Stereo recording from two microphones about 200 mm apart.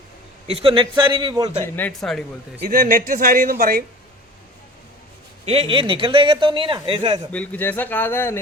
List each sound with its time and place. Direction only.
0.4 s speech: 30° right (ahead or behind)
1.6 s speech: 10° left (ahead or behind)
2.6 s a man's voice: 45° right (ahead or behind)
5.5 s speech: 30° right (ahead or behind)
7.3 s speech: 5° left (ahead or behind)